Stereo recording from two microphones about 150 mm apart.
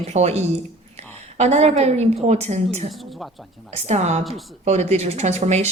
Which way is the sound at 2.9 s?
Centre (ahead or behind).